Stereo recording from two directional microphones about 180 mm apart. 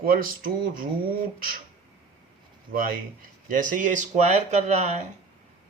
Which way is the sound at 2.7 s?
50° right (ahead or behind).